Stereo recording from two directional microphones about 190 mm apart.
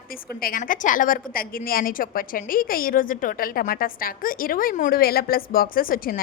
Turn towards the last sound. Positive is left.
turn(degrees=50)  # may be behind; listen again after turning